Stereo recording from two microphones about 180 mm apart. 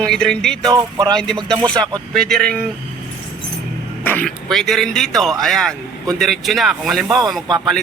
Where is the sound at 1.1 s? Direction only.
5° left (ahead or behind).